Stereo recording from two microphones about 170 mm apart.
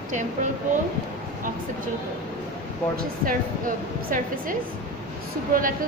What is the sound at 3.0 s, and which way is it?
A woman's voice, 55° right (ahead or behind).